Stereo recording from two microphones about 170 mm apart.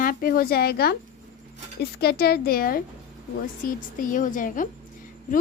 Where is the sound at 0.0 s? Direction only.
55° left (ahead or behind).